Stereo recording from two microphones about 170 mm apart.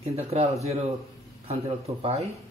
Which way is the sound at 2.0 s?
35° right (ahead or behind).